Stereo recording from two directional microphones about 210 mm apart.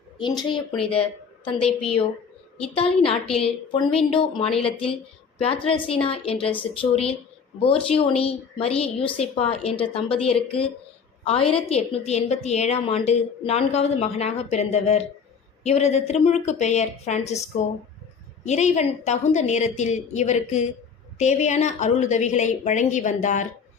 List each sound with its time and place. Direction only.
0.3 s a woman's voice: 25° left (ahead or behind)
11.7 s a woman's voice: 30° left (ahead or behind)
18.4 s a woman's voice: 35° left (ahead or behind)